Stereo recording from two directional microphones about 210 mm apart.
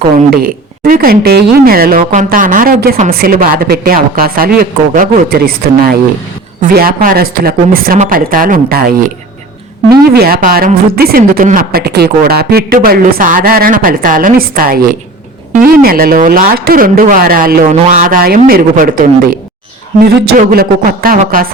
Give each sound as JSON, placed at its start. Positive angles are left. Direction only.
{"t": 0.3, "sound": "a woman's voice", "side_deg": -45}
{"t": 10.2, "sound": "a woman's voice", "side_deg": -45}
{"t": 20.5, "sound": "a woman's voice", "side_deg": -45}